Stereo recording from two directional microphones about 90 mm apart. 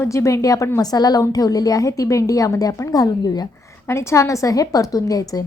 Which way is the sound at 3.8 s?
30° left (ahead or behind).